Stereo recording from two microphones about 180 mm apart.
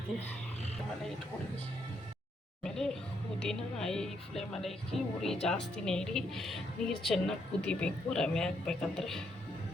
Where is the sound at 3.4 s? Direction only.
5° left (ahead or behind).